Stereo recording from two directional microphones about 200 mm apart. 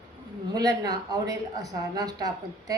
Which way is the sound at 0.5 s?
20° right (ahead or behind).